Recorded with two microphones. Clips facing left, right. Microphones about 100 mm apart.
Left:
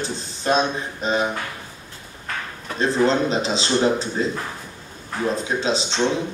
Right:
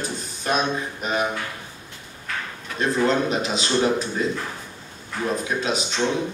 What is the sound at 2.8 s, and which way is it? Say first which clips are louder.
A man's voice: left 2 dB; 30° left (ahead or behind).